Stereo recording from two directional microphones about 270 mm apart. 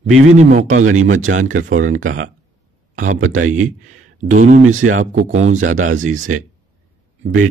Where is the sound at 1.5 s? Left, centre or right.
Right.